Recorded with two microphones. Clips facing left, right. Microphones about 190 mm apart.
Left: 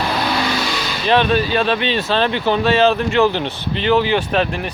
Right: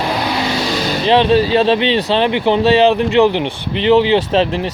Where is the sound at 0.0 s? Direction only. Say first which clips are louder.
Right 2 dB; 20° right (ahead or behind); by 1.0 s 35° right (ahead or behind).